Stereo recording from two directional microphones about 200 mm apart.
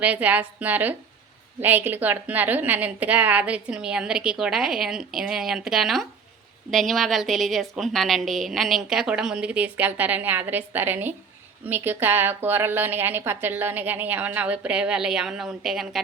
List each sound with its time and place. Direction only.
0.0 s a woman's voice: 5° right (ahead or behind)